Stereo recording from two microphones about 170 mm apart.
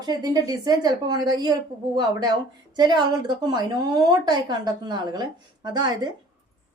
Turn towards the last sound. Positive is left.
turn(degrees=-25)  # may be behind; listen again after turning